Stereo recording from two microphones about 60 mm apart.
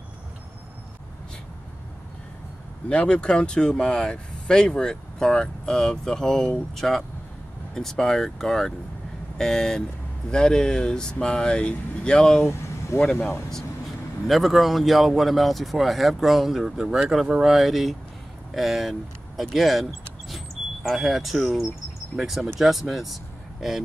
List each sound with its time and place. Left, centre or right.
2.9 s speech: centre
12.4 s speech: left
14.2 s speech: centre